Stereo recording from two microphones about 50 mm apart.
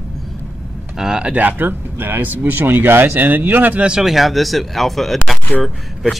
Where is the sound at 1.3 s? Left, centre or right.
Right.